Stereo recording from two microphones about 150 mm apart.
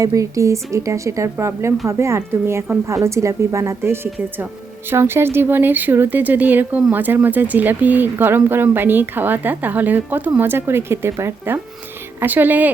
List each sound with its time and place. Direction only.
0.0 s a woman's voice: 20° right (ahead or behind)